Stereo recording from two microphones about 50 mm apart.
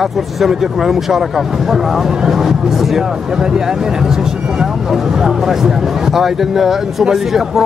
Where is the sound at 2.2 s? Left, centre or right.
Centre.